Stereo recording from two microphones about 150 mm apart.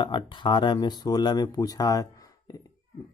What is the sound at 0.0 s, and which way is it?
Speech, 30° left (ahead or behind).